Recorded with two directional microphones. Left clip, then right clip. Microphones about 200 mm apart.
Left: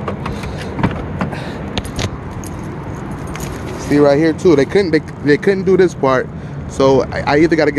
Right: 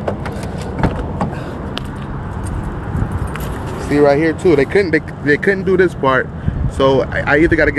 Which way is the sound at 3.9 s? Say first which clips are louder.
Left 1 dB; 30° left (ahead or behind).